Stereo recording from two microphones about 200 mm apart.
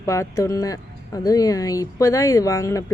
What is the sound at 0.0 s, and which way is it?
Speech, 15° left (ahead or behind).